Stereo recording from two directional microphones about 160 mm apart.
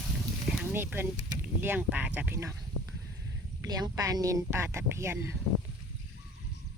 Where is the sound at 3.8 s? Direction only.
25° right (ahead or behind).